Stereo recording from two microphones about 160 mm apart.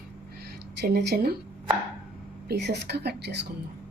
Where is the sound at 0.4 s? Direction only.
85° right.